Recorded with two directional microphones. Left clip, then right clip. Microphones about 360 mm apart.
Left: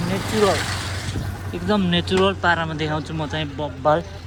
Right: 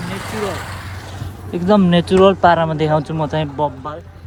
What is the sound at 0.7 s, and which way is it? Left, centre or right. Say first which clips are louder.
Mechanisms: left 4 dB; centre.